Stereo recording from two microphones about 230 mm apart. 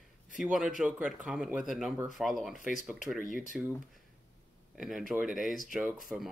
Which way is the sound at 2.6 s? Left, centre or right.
Left.